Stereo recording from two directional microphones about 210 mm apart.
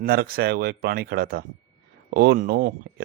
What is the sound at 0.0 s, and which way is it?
Speech, 45° right (ahead or behind).